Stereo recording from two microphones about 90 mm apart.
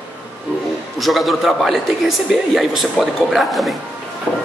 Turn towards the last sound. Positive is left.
turn(degrees=5)  # may be behind; listen again after turning